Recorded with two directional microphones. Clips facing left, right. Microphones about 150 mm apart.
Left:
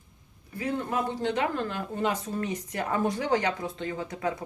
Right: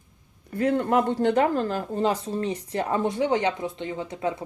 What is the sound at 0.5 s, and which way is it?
Speech, 60° right (ahead or behind).